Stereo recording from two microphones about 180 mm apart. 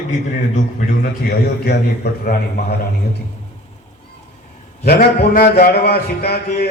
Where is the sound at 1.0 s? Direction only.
65° left (ahead or behind).